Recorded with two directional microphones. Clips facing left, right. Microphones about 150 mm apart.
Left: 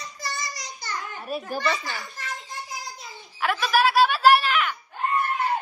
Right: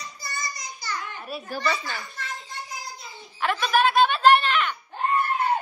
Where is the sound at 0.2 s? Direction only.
90° left.